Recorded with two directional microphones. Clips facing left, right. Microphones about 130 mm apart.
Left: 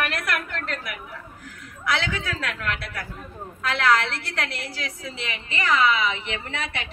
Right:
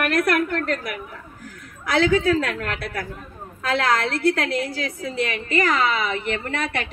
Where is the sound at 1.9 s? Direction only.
40° right (ahead or behind).